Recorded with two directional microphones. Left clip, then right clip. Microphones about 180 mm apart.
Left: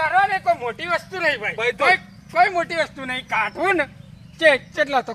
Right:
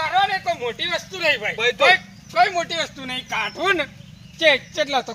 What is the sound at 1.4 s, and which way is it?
Speech, 5° left (ahead or behind).